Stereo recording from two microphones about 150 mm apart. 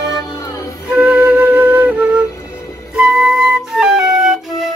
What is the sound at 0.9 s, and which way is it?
Flute, 10° right (ahead or behind).